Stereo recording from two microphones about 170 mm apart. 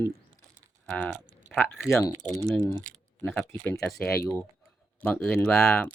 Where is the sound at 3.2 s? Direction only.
10° left (ahead or behind).